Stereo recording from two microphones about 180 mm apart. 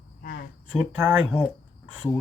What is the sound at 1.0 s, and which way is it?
Speech, 5° right (ahead or behind).